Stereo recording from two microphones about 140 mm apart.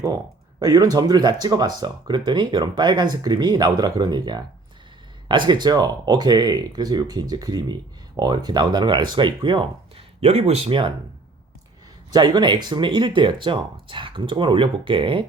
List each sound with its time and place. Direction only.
0.6 s speech: 25° right (ahead or behind)
10.2 s speech: 45° right (ahead or behind)
12.1 s speech: 30° right (ahead or behind)